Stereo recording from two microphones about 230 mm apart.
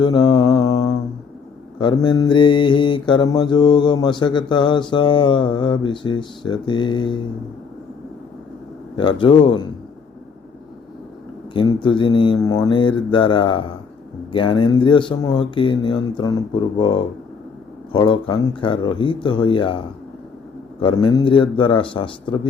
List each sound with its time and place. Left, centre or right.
0.0 s mantra: centre
9.0 s mantra: left
11.5 s mantra: left